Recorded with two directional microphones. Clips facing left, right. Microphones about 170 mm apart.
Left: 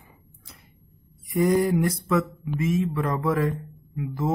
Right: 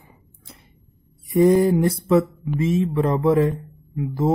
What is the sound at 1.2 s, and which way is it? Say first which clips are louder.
Speech: right 6 dB; 30° right (ahead or behind).